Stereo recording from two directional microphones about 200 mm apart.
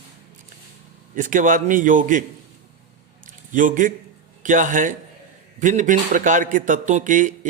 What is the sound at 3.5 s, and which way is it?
A man's voice, 40° right (ahead or behind).